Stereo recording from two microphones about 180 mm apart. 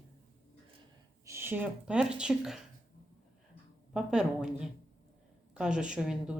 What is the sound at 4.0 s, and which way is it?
A woman's voice, 5° right (ahead or behind).